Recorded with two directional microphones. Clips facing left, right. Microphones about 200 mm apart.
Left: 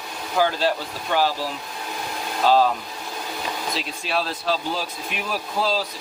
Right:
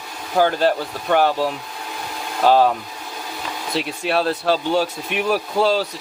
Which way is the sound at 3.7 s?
60° right (ahead or behind).